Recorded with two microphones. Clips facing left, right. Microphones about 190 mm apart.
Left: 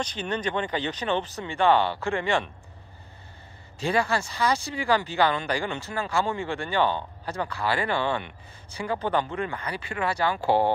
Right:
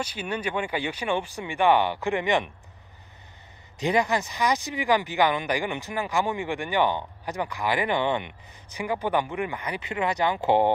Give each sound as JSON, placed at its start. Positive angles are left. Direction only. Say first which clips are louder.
{"t": 0.0, "sound": "speech", "louder": "left 1 dB", "side_deg": -10}
{"t": 3.8, "sound": "speech", "louder": "right 1 dB", "side_deg": -20}